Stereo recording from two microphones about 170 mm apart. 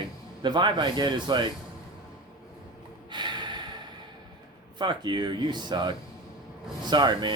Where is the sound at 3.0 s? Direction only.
25° right (ahead or behind).